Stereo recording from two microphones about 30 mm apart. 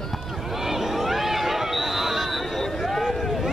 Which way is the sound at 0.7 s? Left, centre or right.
Centre.